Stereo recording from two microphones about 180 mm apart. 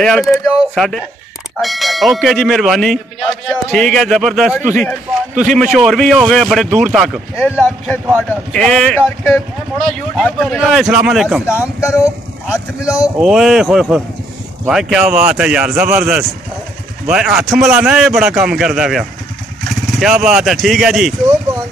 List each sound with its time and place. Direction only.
0.0 s speech: centre (ahead or behind)
5.3 s a man's voice: 45° right (ahead or behind)
5.6 s speech: centre (ahead or behind)
11.4 s speech: 15° left (ahead or behind)
13.0 s speech: 5° right (ahead or behind)
20.2 s speech: centre (ahead or behind)